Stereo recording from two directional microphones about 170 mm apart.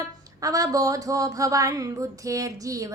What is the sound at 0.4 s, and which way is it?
Speech, 20° right (ahead or behind).